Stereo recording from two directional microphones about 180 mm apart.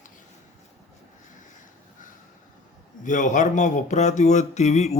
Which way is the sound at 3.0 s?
45° left (ahead or behind).